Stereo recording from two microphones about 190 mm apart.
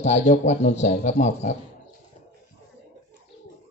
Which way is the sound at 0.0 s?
40° left (ahead or behind).